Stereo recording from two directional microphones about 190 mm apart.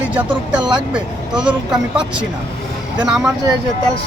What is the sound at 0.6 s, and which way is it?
Speech, 25° right (ahead or behind).